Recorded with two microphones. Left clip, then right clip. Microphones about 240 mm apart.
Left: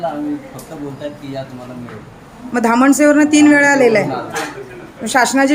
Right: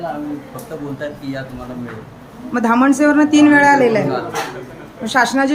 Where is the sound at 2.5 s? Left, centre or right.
Centre.